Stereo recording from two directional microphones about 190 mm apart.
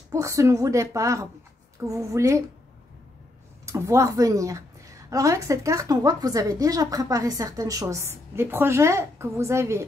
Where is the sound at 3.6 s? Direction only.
15° right (ahead or behind).